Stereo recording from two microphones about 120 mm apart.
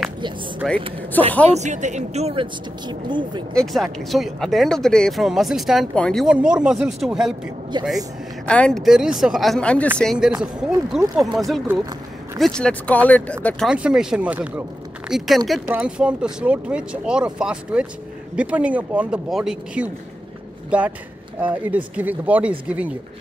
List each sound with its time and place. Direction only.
0.6 s speech: 5° left (ahead or behind)
1.2 s speech: 15° left (ahead or behind)
1.5 s speech: 80° right
2.3 s speech: 40° right (ahead or behind)
3.5 s speech: centre (ahead or behind)
6.2 s speech: 5° right (ahead or behind)
7.7 s speech: 40° right (ahead or behind)
8.5 s speech: 10° left (ahead or behind)
8.8 s speech: 5° right (ahead or behind)
10.1 s speech: 5° right (ahead or behind); by 13.7 s 10° left (ahead or behind)
13.7 s speech: 5° right (ahead or behind)